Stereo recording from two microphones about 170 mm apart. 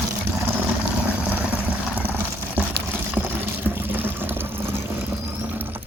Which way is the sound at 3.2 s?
10° right (ahead or behind).